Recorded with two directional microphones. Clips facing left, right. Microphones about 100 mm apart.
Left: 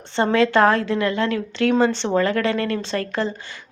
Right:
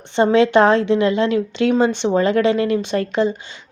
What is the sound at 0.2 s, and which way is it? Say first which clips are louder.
A woman's voice: right 3 dB; 20° right (ahead or behind).